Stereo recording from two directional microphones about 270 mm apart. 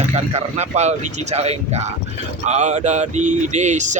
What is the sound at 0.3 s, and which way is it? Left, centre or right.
Speech, right.